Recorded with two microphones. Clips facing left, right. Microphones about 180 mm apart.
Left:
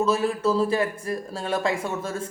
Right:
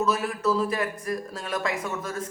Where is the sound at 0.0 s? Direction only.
30° left (ahead or behind).